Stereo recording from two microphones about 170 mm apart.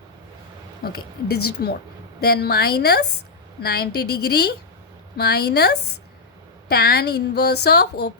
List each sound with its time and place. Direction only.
0.9 s a woman's voice: 70° left (ahead or behind)